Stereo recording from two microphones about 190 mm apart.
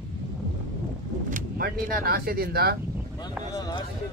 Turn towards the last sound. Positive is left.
turn(degrees=20)  # may be behind; listen again after turning